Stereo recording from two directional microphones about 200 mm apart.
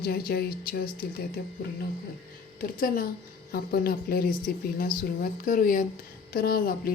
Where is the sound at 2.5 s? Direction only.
45° left (ahead or behind).